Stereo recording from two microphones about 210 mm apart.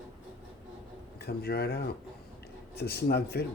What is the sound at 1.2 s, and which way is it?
Speech, 50° left (ahead or behind).